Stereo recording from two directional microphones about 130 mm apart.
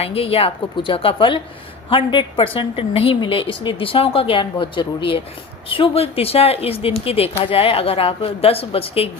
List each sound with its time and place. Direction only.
0.0 s speech: 50° left (ahead or behind)